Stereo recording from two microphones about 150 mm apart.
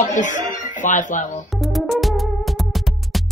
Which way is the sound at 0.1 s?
55° left (ahead or behind).